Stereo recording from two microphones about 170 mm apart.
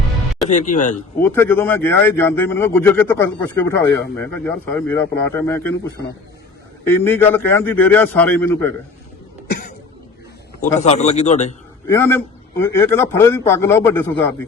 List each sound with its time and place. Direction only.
0.4 s a man's voice: 45° left (ahead or behind)
1.2 s speech: 10° left (ahead or behind)
7.0 s speech: 10° left (ahead or behind)
10.8 s a man's voice: 40° left (ahead or behind)
11.9 s speech: 15° left (ahead or behind)